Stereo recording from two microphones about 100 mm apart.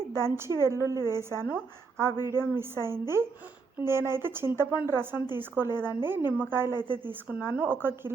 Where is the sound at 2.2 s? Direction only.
20° right (ahead or behind).